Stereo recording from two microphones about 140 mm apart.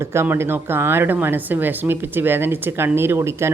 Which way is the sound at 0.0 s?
20° right (ahead or behind).